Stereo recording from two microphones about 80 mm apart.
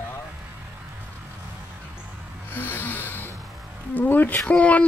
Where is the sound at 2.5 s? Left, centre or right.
Left.